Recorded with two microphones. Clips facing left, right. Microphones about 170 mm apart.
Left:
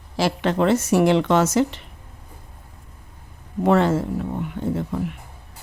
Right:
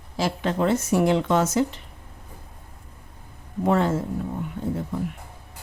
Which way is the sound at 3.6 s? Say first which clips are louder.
Left 4 dB; 80° left.